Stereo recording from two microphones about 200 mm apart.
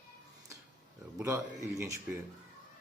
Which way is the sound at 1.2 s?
15° right (ahead or behind).